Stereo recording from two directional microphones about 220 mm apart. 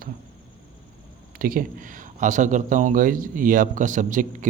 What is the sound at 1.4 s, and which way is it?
Speech, 40° right (ahead or behind).